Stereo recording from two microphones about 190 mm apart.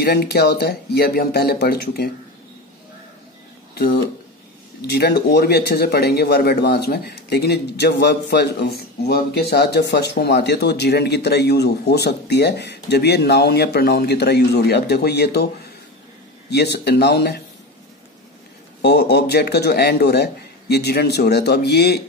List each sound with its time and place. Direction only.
0.0 s speech: 55° left (ahead or behind)
3.7 s speech: 55° left (ahead or behind)
16.4 s speech: 60° left (ahead or behind)
18.8 s speech: 60° left (ahead or behind)